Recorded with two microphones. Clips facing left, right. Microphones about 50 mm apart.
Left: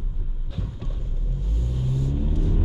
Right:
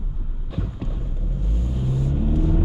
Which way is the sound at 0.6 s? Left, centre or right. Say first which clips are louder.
Right 5 dB; centre.